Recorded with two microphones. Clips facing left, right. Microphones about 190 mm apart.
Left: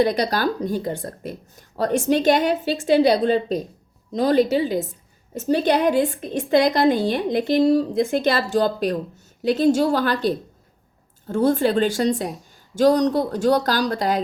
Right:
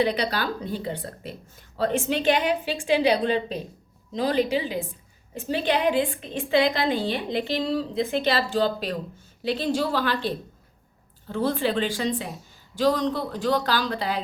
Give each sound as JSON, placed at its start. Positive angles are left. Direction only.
{"t": 0.0, "sound": "a woman's voice", "side_deg": 45}